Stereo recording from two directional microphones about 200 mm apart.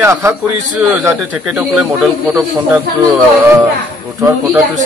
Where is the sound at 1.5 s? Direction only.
5° right (ahead or behind).